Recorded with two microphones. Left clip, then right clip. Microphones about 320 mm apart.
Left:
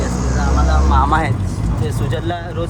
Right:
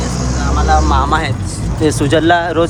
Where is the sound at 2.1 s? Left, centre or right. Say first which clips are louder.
Right 15 dB; centre.